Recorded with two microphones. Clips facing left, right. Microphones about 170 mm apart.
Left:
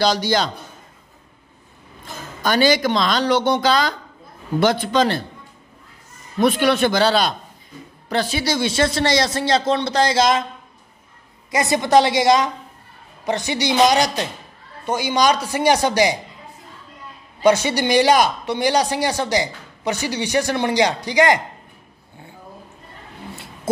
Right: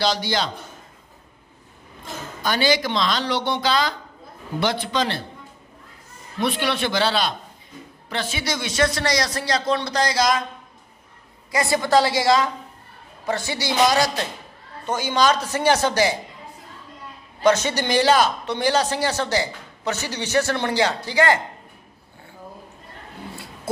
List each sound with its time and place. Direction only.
0.0 s speech: 45° left (ahead or behind)
2.4 s speech: 45° left (ahead or behind)
6.4 s speech: 45° left (ahead or behind); by 10.4 s 25° left (ahead or behind)
11.5 s speech: 20° left (ahead or behind)
17.4 s speech: 10° left (ahead or behind)